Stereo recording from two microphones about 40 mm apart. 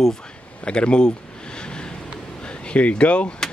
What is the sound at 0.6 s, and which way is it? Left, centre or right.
Speech, left.